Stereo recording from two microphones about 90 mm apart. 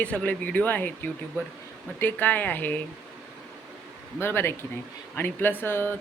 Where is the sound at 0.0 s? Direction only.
15° left (ahead or behind).